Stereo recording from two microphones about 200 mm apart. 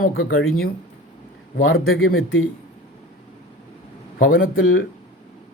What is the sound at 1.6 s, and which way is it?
Speech, 85° left.